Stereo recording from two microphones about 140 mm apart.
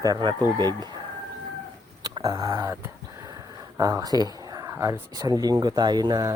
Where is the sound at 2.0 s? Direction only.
25° right (ahead or behind).